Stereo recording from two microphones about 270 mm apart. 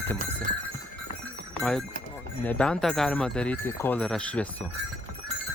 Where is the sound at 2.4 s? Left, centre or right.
Centre.